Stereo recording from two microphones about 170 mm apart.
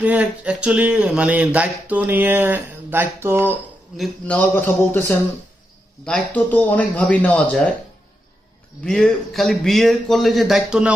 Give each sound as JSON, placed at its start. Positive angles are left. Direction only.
{"t": 0.0, "sound": "a sound", "side_deg": -10}
{"t": 3.9, "sound": "speech", "side_deg": 5}
{"t": 8.8, "sound": "a man's voice", "side_deg": 5}